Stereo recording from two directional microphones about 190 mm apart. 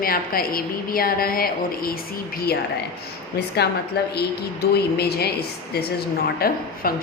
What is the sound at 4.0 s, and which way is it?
A woman's voice, 60° left (ahead or behind).